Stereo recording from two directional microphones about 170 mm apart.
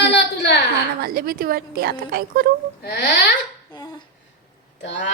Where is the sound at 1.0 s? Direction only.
60° right (ahead or behind).